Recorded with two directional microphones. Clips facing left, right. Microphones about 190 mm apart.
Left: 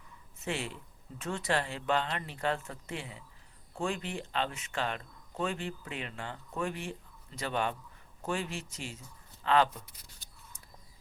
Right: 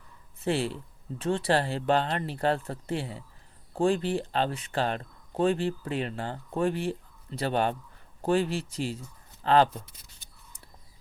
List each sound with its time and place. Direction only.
0.3 s speech: 35° right (ahead or behind)